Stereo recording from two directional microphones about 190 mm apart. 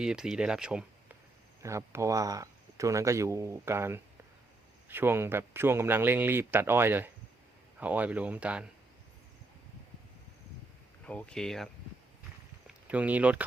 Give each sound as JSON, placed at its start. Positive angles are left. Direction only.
{"t": 0.0, "sound": "speech", "side_deg": -5}
{"t": 1.6, "sound": "speech", "side_deg": -15}
{"t": 11.0, "sound": "speech", "side_deg": 5}
{"t": 12.6, "sound": "a sound", "side_deg": -5}